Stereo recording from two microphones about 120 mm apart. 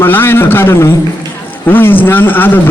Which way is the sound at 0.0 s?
20° left (ahead or behind).